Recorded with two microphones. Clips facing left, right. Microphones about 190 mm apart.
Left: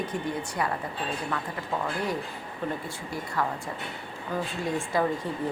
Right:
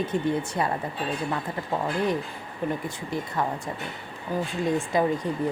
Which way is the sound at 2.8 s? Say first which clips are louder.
Right 4 dB; 20° right (ahead or behind).